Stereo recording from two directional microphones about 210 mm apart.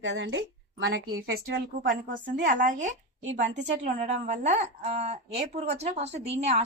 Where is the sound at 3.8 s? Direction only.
30° right (ahead or behind).